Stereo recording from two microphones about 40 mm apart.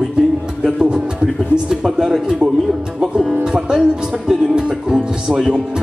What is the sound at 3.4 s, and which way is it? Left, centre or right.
Speech, centre.